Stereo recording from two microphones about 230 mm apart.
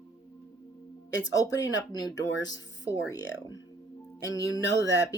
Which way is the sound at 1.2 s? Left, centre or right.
Centre.